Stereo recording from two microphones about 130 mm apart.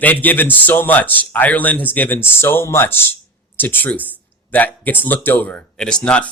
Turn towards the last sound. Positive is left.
turn(degrees=10)  # may be behind; listen again after turning